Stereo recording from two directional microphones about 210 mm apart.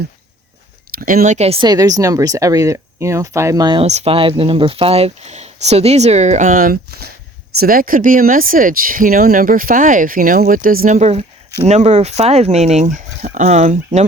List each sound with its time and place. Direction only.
0.9 s speech: 40° right (ahead or behind)